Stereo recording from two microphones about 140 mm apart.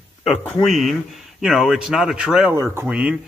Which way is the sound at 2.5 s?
20° right (ahead or behind).